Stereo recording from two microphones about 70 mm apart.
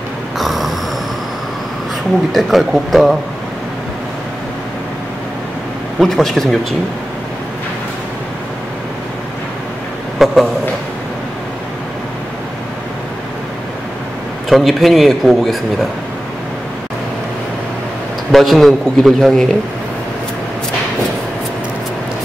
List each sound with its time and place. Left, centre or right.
0.4 s a sound: centre
2.3 s a man's voice: centre
5.9 s a man's voice: centre
10.1 s a man's voice: centre
14.5 s a man's voice: centre
18.3 s a man's voice: centre